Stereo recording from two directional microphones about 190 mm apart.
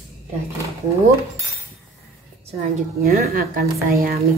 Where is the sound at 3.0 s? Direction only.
50° right (ahead or behind).